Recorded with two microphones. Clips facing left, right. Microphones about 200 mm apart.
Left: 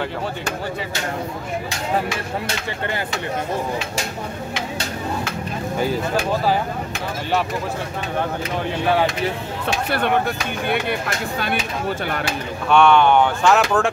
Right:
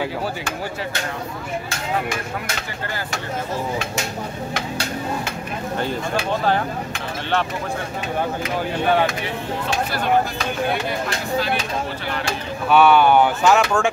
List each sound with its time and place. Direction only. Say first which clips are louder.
9.7 s speech: left 1 dB; 60° left (ahead or behind)
12.6 s speech: even; 5° right (ahead or behind)